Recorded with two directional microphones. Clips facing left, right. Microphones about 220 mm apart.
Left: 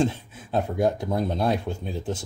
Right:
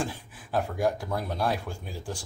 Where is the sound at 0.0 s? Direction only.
25° left (ahead or behind).